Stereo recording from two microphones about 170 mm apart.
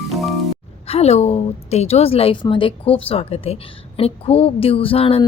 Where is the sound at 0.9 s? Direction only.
40° left (ahead or behind).